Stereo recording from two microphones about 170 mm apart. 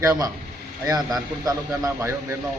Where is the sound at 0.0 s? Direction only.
20° right (ahead or behind).